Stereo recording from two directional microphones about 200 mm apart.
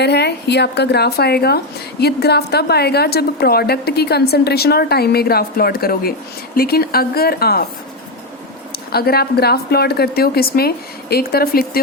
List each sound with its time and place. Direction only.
0.0 s a woman's voice: 55° left (ahead or behind)
8.7 s a woman's voice: 50° left (ahead or behind)